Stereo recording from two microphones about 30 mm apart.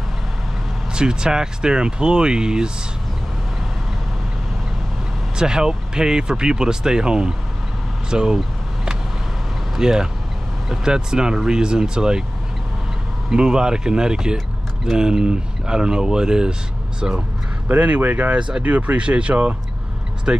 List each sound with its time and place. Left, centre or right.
0.9 s speech: right
5.4 s speech: right
9.8 s speech: right
13.3 s speech: right
17.6 s speech: right
18.3 s speech: right
18.6 s speech: right
18.9 s speech: right